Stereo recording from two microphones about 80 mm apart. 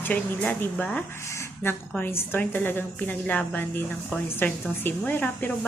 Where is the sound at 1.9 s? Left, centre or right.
Left.